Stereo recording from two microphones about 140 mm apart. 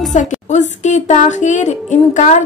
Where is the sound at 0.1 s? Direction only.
60° left (ahead or behind).